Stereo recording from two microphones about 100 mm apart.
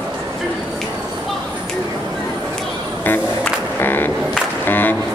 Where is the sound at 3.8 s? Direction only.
20° left (ahead or behind).